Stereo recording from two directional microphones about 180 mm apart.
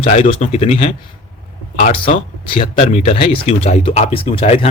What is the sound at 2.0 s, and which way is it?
Speech, 30° left (ahead or behind).